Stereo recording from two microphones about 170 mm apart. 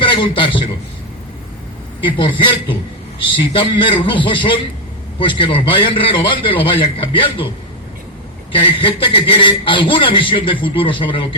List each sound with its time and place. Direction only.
0.0 s a man's voice: 30° left (ahead or behind)
2.0 s a man's voice: 30° left (ahead or behind)
8.5 s a man's voice: 30° left (ahead or behind)